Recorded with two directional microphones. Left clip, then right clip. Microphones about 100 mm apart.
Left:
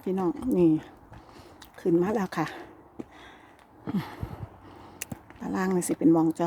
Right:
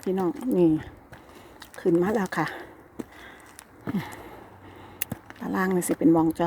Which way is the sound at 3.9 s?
45° left (ahead or behind).